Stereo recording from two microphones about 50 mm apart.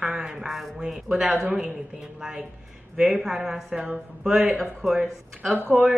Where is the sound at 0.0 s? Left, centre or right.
Centre.